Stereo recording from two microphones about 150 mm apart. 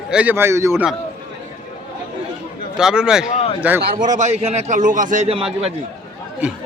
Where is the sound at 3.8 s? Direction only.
75° right (ahead or behind); by 5.3 s 55° right (ahead or behind).